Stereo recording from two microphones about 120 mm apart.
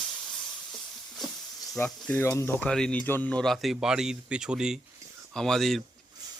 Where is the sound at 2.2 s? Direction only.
20° left (ahead or behind).